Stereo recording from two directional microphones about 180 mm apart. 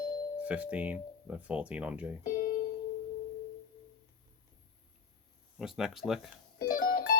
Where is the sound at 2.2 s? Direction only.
50° left (ahead or behind).